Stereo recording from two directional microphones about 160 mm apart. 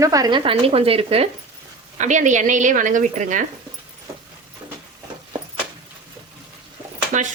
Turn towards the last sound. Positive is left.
turn(degrees=-50)  # may be behind; listen again after turning